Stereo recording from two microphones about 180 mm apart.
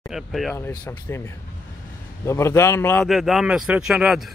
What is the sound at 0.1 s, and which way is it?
Speech, centre (ahead or behind).